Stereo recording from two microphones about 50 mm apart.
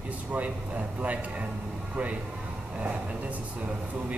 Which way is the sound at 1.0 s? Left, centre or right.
Right.